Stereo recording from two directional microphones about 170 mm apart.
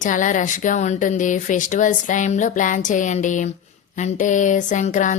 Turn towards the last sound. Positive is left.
turn(degrees=45)  # may be behind; listen again after turning